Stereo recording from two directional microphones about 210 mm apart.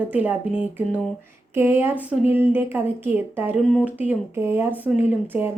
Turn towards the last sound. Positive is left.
turn(degrees=-10)  # may be behind; listen again after turning